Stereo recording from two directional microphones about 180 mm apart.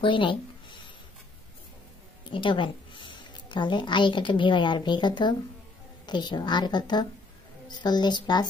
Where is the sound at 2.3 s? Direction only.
30° left (ahead or behind).